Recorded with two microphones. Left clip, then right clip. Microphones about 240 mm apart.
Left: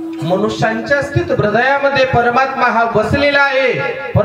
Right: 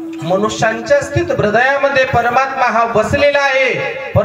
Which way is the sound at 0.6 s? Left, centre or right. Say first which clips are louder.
Right 2 dB; centre.